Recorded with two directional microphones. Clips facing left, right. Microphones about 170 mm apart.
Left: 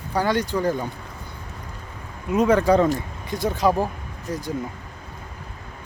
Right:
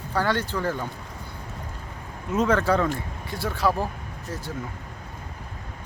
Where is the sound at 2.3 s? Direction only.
15° left (ahead or behind).